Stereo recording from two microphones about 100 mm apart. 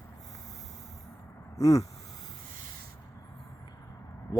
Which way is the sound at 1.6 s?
35° left (ahead or behind).